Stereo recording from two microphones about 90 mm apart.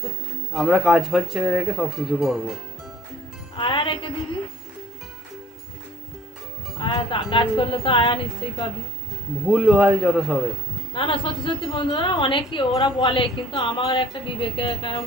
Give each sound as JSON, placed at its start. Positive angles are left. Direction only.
{"t": 0.5, "sound": "speech", "side_deg": -5}
{"t": 3.5, "sound": "music", "side_deg": 65}
{"t": 6.8, "sound": "a woman's voice", "side_deg": 60}
{"t": 9.5, "sound": "a man's voice", "side_deg": -5}
{"t": 10.9, "sound": "a woman's voice", "side_deg": 65}